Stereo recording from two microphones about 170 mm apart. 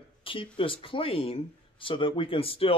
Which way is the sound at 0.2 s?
30° left (ahead or behind).